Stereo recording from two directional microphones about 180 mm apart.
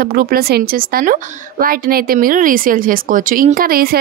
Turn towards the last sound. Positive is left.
turn(degrees=-55)  # may be behind; listen again after turning